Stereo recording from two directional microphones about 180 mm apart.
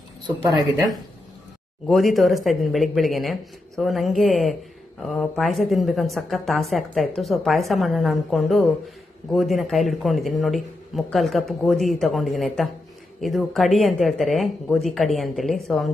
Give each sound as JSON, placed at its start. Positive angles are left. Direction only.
{"t": 0.4, "sound": "speech", "side_deg": -20}
{"t": 1.9, "sound": "speech", "side_deg": 0}